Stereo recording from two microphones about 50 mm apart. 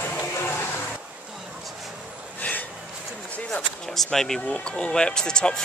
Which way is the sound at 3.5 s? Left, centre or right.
Centre.